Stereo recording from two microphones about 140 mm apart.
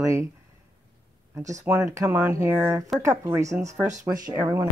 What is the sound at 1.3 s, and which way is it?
Speech, 25° right (ahead or behind).